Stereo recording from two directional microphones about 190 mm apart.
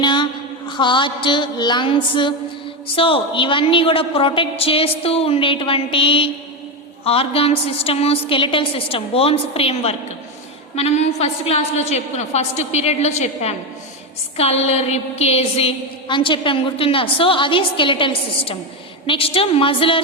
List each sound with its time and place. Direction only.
0.0 s a woman's voice: 25° left (ahead or behind)